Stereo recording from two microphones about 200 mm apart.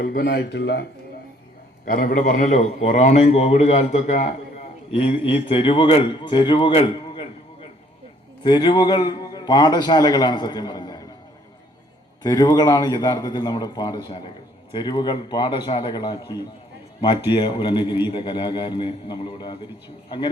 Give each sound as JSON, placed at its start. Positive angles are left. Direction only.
{"t": 0.0, "sound": "speech", "side_deg": 50}
{"t": 1.8, "sound": "a man's voice", "side_deg": 45}
{"t": 8.4, "sound": "a man's voice", "side_deg": 20}
{"t": 12.2, "sound": "a man's voice", "side_deg": 20}